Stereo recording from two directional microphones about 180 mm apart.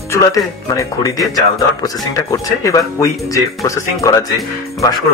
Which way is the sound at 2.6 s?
20° left (ahead or behind).